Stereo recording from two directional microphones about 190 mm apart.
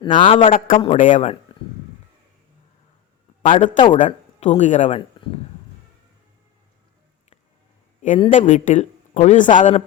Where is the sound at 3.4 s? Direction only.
40° left (ahead or behind).